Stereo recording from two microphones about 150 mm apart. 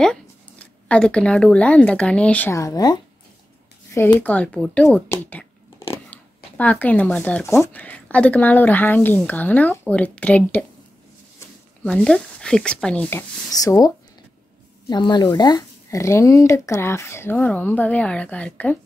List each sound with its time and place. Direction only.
0.0 s speech: 5° left (ahead or behind)
2.5 s speech: 25° left (ahead or behind)
4.2 s speech: 10° left (ahead or behind)
6.0 s a sound: 10° left (ahead or behind)
7.6 s speech: 10° left (ahead or behind)
11.8 s speech: 5° left (ahead or behind)
13.5 s speech: 25° left (ahead or behind)